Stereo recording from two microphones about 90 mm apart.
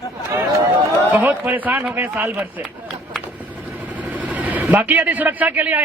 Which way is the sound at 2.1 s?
5° right (ahead or behind).